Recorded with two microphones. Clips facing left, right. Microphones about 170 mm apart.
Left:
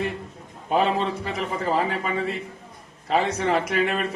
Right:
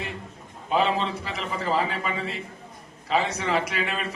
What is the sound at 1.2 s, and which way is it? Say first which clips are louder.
A man's voice: left 3 dB; 50° left (ahead or behind).